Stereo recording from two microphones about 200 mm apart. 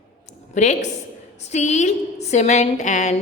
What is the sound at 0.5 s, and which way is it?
A woman's voice, 35° left (ahead or behind).